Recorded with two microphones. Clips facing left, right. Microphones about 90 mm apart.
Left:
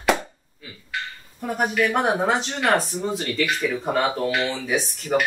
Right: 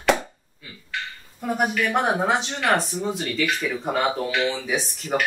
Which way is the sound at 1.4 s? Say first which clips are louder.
Left 1 dB; centre (ahead or behind).